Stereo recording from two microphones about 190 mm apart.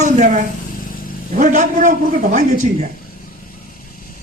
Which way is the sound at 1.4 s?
40° right (ahead or behind).